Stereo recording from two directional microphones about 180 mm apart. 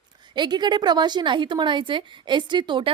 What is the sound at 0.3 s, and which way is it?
A woman's voice, 25° right (ahead or behind).